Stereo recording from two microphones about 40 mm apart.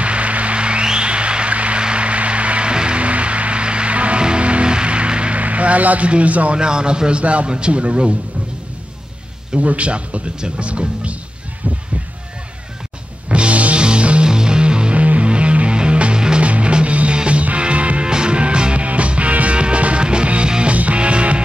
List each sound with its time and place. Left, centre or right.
0.0 s a sound: right
1.8 s music: right
5.4 s a sound: right
6.0 s speech: right
6.6 s a man's voice: right
9.6 s speech: right
13.3 s music: right
18.0 s music: right